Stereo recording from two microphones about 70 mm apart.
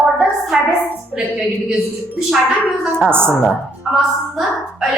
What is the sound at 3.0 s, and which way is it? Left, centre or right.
Speech, right.